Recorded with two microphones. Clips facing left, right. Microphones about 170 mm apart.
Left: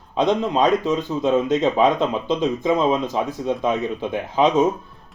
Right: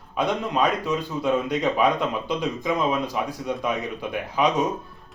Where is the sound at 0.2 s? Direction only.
20° left (ahead or behind).